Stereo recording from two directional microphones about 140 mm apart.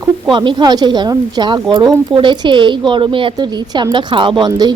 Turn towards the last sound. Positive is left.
turn(degrees=-30)  # may be behind; listen again after turning